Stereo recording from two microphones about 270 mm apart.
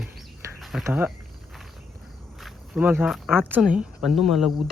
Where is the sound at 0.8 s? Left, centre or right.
Centre.